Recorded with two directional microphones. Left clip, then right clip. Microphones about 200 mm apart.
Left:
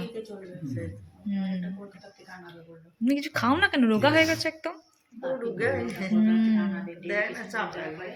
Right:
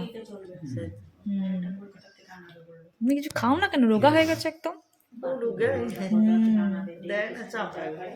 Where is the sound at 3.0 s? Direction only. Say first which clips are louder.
Even; 5° right (ahead or behind).